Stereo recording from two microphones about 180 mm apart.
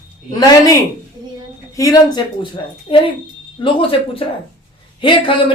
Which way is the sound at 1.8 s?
20° left (ahead or behind).